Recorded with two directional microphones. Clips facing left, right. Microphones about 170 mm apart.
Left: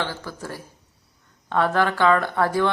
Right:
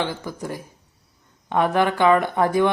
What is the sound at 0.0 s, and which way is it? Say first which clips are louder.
Speech: right 3 dB; 15° right (ahead or behind).